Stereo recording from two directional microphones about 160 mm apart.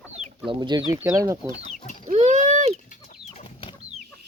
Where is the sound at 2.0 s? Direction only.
50° right (ahead or behind).